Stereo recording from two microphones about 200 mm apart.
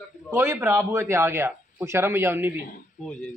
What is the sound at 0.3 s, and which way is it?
A man's voice, 10° right (ahead or behind).